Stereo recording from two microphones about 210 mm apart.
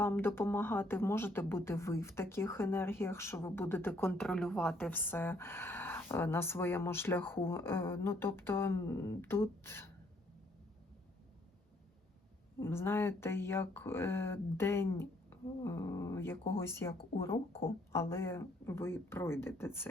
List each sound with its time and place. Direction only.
0.0 s speech: 10° left (ahead or behind)
12.5 s speech: 10° left (ahead or behind)
17.5 s speech: 25° left (ahead or behind)
17.9 s speech: 10° left (ahead or behind)